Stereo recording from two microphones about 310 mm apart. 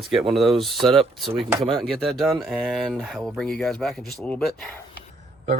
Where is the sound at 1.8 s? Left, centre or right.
Centre.